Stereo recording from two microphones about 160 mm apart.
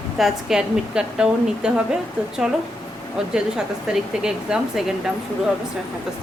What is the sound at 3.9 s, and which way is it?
A woman's voice, 5° right (ahead or behind).